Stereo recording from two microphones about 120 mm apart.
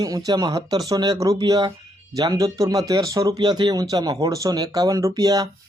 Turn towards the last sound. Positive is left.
turn(degrees=-30)  # may be behind; listen again after turning